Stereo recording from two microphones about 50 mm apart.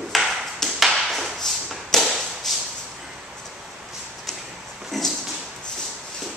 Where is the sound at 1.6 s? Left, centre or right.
Centre.